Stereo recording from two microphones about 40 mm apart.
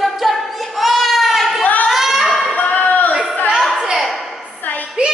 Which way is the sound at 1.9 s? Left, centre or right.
Centre.